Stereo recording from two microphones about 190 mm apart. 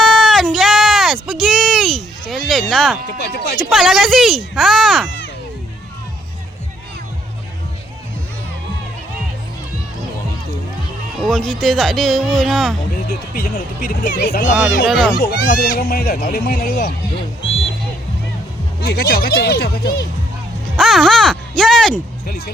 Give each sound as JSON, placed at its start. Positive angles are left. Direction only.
{"t": 0.0, "sound": "a sound", "side_deg": 5}
{"t": 3.1, "sound": "speech", "side_deg": 60}
{"t": 3.7, "sound": "speech", "side_deg": 0}
{"t": 11.2, "sound": "speech", "side_deg": 0}
{"t": 13.1, "sound": "speech", "side_deg": 55}
{"t": 14.8, "sound": "speech", "side_deg": 0}
{"t": 15.2, "sound": "speech", "side_deg": 50}
{"t": 18.9, "sound": "speech", "side_deg": 55}
{"t": 20.7, "sound": "speech", "side_deg": 0}
{"t": 22.3, "sound": "speech", "side_deg": 50}